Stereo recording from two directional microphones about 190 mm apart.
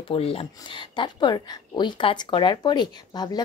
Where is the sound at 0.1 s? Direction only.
30° left (ahead or behind).